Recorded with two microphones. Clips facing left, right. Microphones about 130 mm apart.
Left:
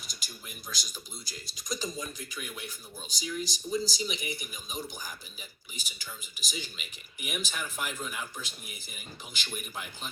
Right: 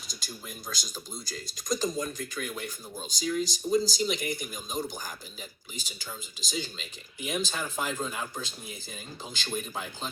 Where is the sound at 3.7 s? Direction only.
40° right (ahead or behind).